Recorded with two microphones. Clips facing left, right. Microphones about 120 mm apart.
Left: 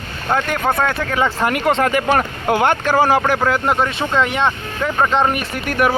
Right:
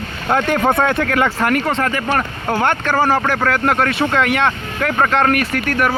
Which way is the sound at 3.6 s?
Centre (ahead or behind).